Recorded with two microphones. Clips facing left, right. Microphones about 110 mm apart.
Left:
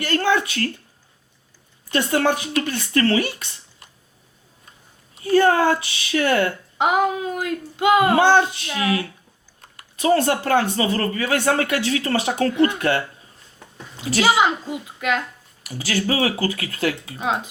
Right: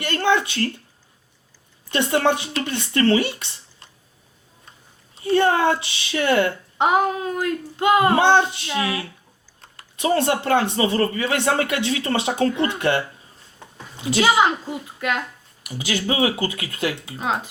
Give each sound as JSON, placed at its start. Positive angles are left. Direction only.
{"t": 0.0, "sound": "speech", "side_deg": -25}
{"t": 1.9, "sound": "speech", "side_deg": -25}
{"t": 5.1, "sound": "speech", "side_deg": -25}
{"t": 7.3, "sound": "a child's voice", "side_deg": 15}
{"t": 8.0, "sound": "speech", "side_deg": -25}
{"t": 14.3, "sound": "a child's voice", "side_deg": 20}
{"t": 15.6, "sound": "speech", "side_deg": -20}
{"t": 17.2, "sound": "speech", "side_deg": 20}